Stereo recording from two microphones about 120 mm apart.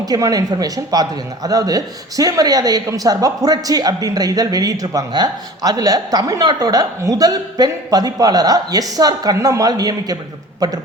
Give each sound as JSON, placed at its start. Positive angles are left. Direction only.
{"t": 0.0, "sound": "speech", "side_deg": -30}